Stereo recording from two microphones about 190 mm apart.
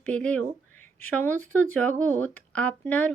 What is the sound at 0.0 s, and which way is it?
A woman's voice, 5° left (ahead or behind).